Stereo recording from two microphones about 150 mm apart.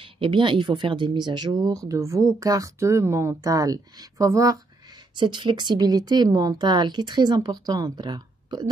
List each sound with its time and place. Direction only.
0.0 s speech: 35° right (ahead or behind)